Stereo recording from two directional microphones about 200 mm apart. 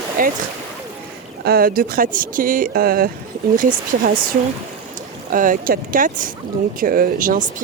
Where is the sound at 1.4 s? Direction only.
50° right (ahead or behind).